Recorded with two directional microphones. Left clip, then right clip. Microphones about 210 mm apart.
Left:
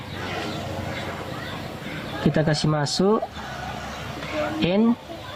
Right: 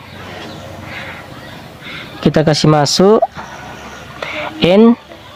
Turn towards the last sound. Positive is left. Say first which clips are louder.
# right 13 dB
turn(degrees=-45)  # may be behind; listen again after turning